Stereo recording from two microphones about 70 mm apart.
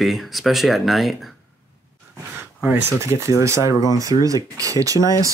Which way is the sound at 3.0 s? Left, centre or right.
Right.